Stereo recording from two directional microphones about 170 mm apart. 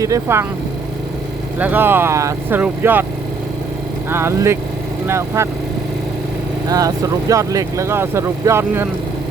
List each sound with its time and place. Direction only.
0.0 s speech: 15° right (ahead or behind)
1.5 s speech: 10° right (ahead or behind)
4.1 s speech: 15° right (ahead or behind)
6.7 s speech: 20° right (ahead or behind)